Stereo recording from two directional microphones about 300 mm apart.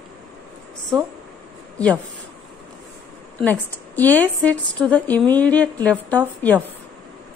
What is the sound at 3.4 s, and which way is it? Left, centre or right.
A woman's voice, centre.